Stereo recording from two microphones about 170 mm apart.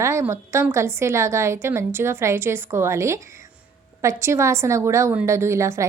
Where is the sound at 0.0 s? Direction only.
15° right (ahead or behind).